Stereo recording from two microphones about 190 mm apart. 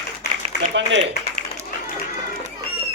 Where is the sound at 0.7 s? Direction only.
70° right (ahead or behind).